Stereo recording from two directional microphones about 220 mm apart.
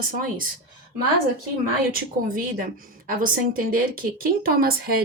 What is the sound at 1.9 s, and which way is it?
Speech, 40° right (ahead or behind).